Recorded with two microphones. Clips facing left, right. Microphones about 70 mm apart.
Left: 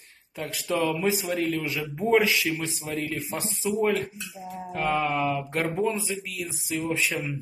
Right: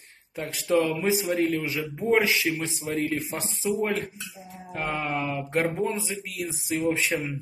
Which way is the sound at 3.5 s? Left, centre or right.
Right.